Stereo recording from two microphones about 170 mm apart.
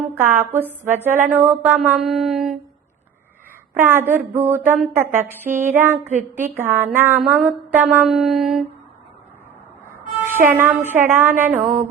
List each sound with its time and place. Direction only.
0.1 s a woman's voice: 15° right (ahead or behind)
3.8 s speech: 10° right (ahead or behind)
10.2 s music: 15° right (ahead or behind)
10.5 s speech: 10° right (ahead or behind)
11.5 s mantra: 50° right (ahead or behind)